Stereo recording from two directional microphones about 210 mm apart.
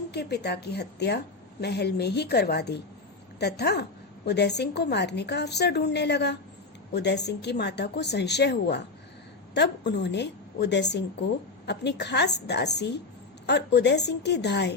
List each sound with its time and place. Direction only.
0.1 s a woman's voice: 50° left (ahead or behind)